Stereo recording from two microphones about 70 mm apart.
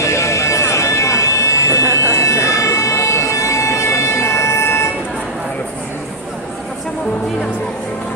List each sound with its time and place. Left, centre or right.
0.0 s vehicle: left